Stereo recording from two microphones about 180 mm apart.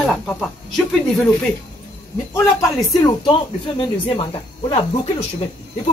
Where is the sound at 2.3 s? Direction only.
15° left (ahead or behind).